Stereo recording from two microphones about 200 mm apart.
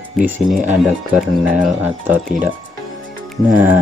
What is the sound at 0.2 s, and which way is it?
Speech, 5° right (ahead or behind).